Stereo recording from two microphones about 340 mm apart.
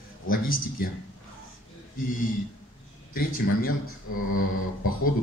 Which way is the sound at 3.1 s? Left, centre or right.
Left.